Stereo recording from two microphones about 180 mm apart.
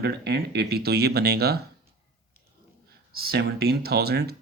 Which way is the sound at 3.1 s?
60° right (ahead or behind).